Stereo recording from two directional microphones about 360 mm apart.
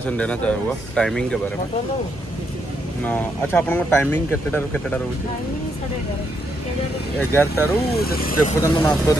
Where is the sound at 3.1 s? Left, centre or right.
Centre.